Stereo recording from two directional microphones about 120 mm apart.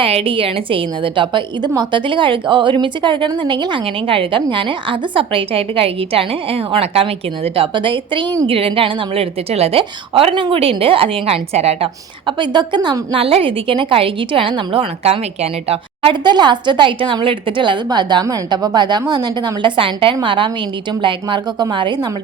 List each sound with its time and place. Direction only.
0.0 s a woman's voice: 50° right (ahead or behind)
12.2 s a woman's voice: 40° right (ahead or behind)
13.2 s a woman's voice: 50° right (ahead or behind)
16.2 s a woman's voice: 40° right (ahead or behind)